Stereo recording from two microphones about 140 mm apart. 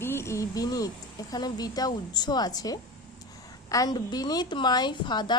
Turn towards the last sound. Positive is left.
turn(degrees=30)  # may be behind; listen again after turning